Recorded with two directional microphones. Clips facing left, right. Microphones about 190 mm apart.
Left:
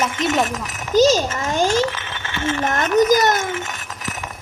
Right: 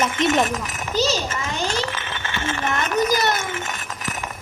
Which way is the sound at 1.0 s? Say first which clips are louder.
Left 8 dB; 45° left (ahead or behind).